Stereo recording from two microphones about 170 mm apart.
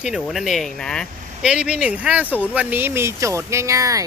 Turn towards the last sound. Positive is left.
turn(degrees=-20)  # may be behind; listen again after turning